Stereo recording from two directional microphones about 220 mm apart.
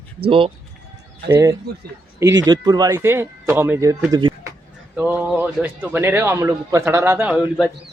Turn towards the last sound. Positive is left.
turn(degrees=-5)  # may be behind; listen again after turning